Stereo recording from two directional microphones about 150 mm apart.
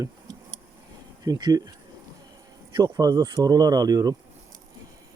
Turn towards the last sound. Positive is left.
turn(degrees=-25)  # may be behind; listen again after turning